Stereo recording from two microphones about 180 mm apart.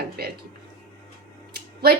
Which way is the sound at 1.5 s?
60° right (ahead or behind).